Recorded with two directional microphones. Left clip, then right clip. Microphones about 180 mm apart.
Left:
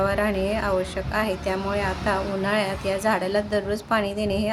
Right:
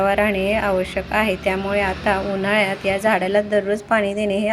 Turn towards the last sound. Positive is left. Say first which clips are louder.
# right 5 dB
turn(degrees=-10)  # may be behind; listen again after turning